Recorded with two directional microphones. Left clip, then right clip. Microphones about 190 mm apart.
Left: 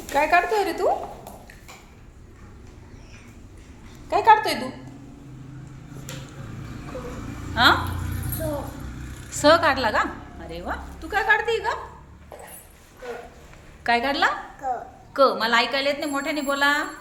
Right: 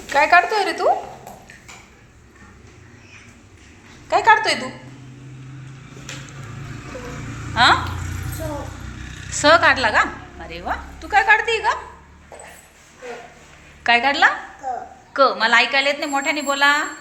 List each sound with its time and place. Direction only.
0.1 s a woman's voice: centre (ahead or behind)
4.1 s a woman's voice: centre (ahead or behind)
7.5 s speech: 10° left (ahead or behind)
9.3 s speech: 10° left (ahead or behind)
13.8 s a woman's voice: 5° left (ahead or behind)